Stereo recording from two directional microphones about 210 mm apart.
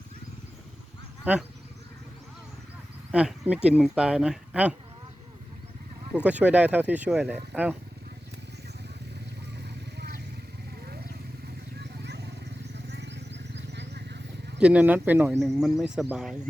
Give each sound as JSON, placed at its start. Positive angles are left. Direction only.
{"t": 1.2, "sound": "speech", "side_deg": -5}
{"t": 3.1, "sound": "speech", "side_deg": -5}
{"t": 6.1, "sound": "speech", "side_deg": -5}
{"t": 11.8, "sound": "vehicle", "side_deg": -55}
{"t": 14.6, "sound": "speech", "side_deg": -5}